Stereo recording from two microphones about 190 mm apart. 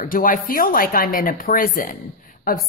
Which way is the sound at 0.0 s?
45° left (ahead or behind).